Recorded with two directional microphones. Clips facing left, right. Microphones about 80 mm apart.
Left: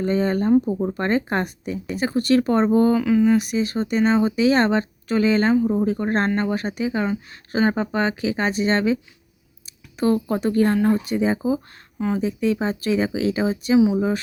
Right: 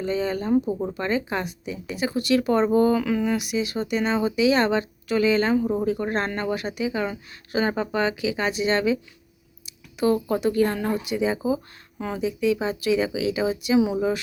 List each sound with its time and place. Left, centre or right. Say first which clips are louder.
0.0 s speech: left 5 dB; left
0.6 s speech: left 3 dB; centre
0.9 s speech: left 4 dB; left
11.9 s speech: left 6 dB; centre
12.2 s speech: right 2 dB; left
13.7 s speech: left 4 dB; centre